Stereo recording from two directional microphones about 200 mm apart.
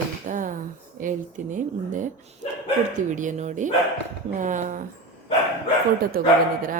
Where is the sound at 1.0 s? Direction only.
40° right (ahead or behind).